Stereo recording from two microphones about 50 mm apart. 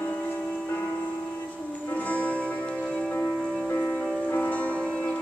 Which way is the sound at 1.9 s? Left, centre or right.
Left.